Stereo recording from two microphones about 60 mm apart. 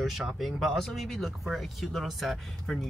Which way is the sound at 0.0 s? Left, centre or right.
Centre.